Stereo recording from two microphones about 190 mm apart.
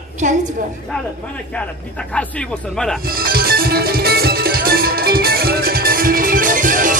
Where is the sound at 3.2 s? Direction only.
50° right (ahead or behind).